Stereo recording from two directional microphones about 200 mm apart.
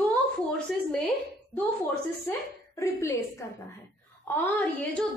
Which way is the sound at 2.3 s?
15° left (ahead or behind).